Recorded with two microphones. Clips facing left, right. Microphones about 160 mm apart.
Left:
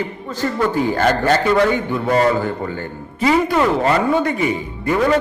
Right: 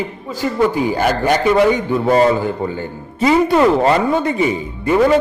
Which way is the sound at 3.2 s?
25° right (ahead or behind).